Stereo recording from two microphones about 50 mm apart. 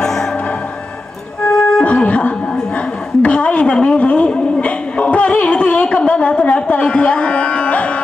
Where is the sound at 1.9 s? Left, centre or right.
Left.